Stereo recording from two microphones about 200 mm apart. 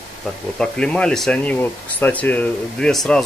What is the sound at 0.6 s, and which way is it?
Speech, 5° left (ahead or behind).